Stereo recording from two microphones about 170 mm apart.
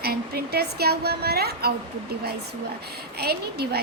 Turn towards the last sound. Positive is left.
turn(degrees=-70)  # may be behind; listen again after turning